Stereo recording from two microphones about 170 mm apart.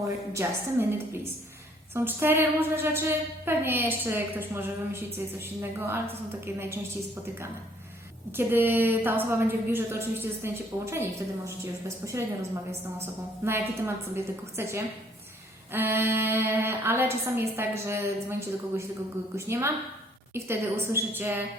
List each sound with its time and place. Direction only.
0.0 s a woman's voice: 15° right (ahead or behind)
6.4 s a woman's voice: 15° right (ahead or behind)
8.4 s a woman's voice: 10° right (ahead or behind)